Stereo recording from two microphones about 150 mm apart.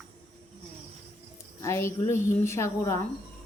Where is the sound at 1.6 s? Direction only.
15° left (ahead or behind).